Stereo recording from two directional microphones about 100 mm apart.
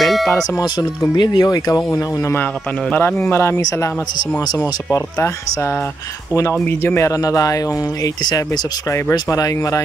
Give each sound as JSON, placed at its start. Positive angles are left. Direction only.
{"t": 0.0, "sound": "music", "side_deg": 0}
{"t": 0.3, "sound": "speech", "side_deg": 40}
{"t": 4.9, "sound": "speech", "side_deg": 25}